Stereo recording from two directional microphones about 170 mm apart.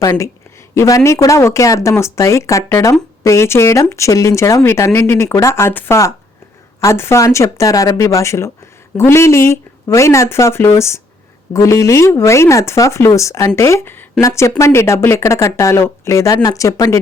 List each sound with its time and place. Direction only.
0.0 s a woman's voice: 20° left (ahead or behind)